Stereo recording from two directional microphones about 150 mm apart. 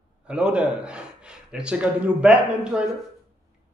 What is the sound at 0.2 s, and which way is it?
Speech, 5° right (ahead or behind).